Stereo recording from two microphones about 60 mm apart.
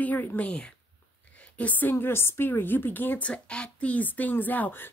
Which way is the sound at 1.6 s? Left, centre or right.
Left.